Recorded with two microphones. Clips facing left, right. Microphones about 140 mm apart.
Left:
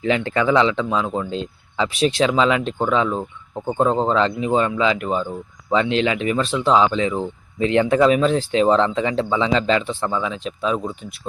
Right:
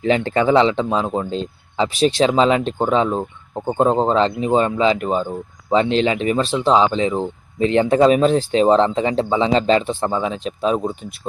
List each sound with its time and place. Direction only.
0.0 s speech: 30° right (ahead or behind)